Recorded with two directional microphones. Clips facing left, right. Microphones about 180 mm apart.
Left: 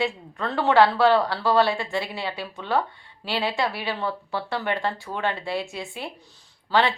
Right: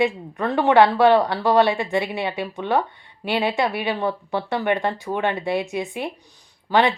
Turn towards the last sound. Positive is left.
turn(degrees=-20)  # may be behind; listen again after turning